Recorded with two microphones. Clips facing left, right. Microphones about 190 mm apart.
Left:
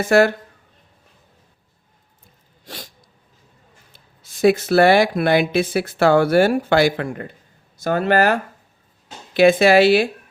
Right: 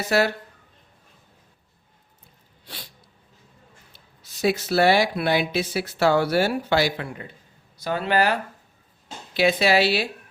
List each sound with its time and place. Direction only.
0.0 s speech: 50° left (ahead or behind)
2.6 s sneeze: 45° left (ahead or behind)
4.2 s speech: 50° left (ahead or behind)